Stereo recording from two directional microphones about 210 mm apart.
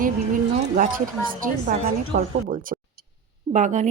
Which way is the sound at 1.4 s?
40° right (ahead or behind).